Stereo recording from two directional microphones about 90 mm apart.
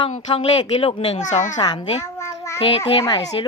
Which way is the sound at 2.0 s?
30° left (ahead or behind).